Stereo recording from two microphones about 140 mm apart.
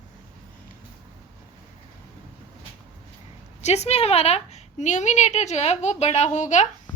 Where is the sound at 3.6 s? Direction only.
50° left (ahead or behind).